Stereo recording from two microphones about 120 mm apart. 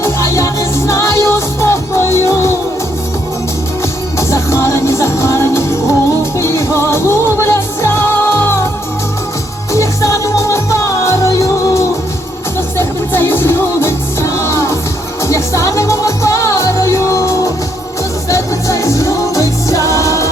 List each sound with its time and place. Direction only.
0.0 s music: 25° left (ahead or behind)
4.2 s music: 25° left (ahead or behind)
9.7 s music: 25° left (ahead or behind)